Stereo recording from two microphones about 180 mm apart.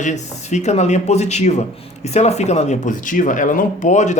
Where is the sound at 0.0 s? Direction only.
40° left (ahead or behind).